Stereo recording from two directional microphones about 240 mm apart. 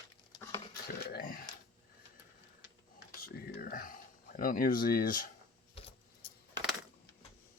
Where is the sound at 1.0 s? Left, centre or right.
Left.